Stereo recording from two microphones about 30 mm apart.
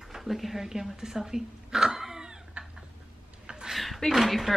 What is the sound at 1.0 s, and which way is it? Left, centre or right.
Cat, right.